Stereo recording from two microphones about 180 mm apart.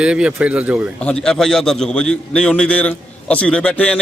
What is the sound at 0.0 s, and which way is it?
Speech, 5° right (ahead or behind).